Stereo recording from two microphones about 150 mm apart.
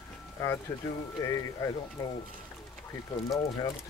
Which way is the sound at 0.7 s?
20° left (ahead or behind).